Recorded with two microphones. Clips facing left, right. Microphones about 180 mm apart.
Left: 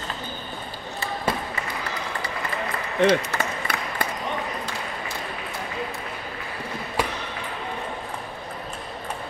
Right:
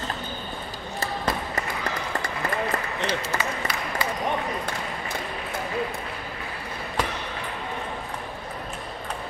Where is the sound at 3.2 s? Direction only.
55° left (ahead or behind).